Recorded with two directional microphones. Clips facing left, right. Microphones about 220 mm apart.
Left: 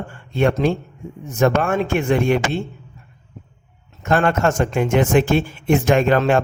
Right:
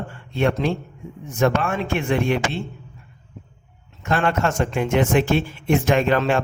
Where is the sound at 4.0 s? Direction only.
45° left (ahead or behind).